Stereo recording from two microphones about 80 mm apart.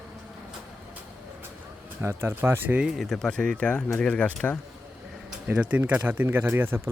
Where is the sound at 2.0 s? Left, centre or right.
Right.